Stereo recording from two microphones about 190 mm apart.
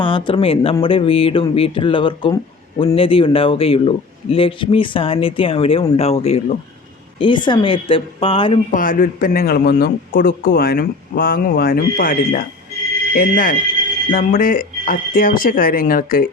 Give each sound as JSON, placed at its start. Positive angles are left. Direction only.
{"t": 0.0, "sound": "a man's voice", "side_deg": 25}
{"t": 8.7, "sound": "a man's voice", "side_deg": 45}